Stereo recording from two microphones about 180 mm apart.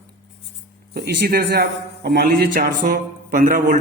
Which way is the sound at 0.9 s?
65° right (ahead or behind).